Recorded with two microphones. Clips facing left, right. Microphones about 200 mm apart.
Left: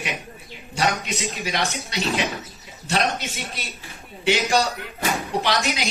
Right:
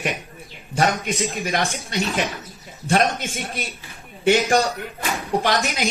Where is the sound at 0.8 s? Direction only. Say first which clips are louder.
Right 3 dB; 50° right (ahead or behind).